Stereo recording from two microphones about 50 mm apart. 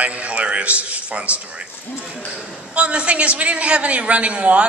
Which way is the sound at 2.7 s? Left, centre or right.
Right.